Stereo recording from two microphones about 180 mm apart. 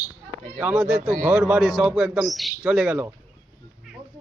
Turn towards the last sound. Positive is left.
turn(degrees=-5)  # may be behind; listen again after turning